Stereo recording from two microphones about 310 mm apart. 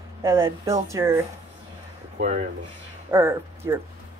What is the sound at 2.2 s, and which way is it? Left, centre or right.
Speech, right.